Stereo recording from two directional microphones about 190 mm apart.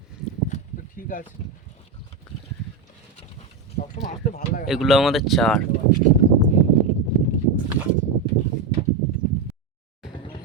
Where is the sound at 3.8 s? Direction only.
45° left (ahead or behind).